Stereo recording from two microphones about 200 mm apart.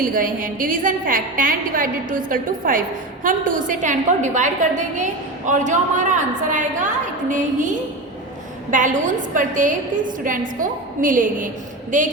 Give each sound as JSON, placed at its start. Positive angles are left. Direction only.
{"t": 0.0, "sound": "a woman's voice", "side_deg": -45}
{"t": 8.7, "sound": "a woman's voice", "side_deg": -40}